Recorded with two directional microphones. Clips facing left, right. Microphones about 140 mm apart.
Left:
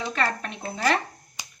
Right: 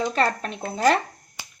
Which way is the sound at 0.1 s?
35° right (ahead or behind).